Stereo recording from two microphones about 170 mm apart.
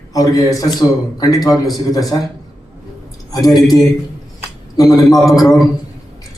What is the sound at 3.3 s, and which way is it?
Speech, 20° left (ahead or behind).